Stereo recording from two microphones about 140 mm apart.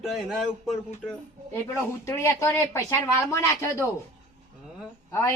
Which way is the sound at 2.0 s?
20° left (ahead or behind).